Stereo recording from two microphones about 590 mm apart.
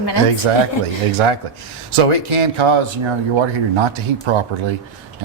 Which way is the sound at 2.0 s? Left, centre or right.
Right.